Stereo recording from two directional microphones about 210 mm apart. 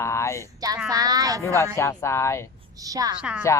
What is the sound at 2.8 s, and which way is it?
Speech, 15° right (ahead or behind).